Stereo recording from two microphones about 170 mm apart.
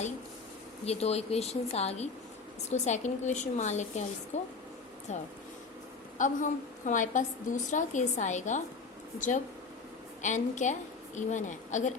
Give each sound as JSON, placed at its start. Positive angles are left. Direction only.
{"t": 0.9, "sound": "a woman's voice", "side_deg": 40}